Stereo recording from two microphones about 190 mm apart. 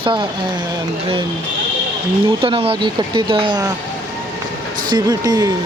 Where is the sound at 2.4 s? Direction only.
30° right (ahead or behind).